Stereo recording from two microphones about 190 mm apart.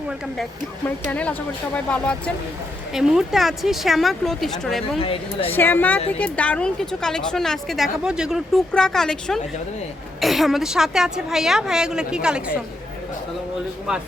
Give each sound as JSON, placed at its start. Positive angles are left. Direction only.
{"t": 0.9, "sound": "speech", "side_deg": 10}
{"t": 4.9, "sound": "speech", "side_deg": 30}
{"t": 5.5, "sound": "speech", "side_deg": 10}